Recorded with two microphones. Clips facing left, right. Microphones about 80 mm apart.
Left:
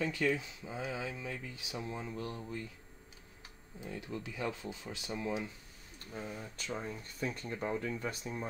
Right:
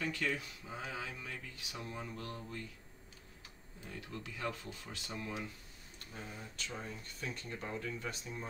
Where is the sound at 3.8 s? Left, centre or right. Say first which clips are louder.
Left 5 dB; centre.